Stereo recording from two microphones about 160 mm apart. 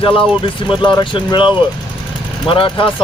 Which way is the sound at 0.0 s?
30° left (ahead or behind).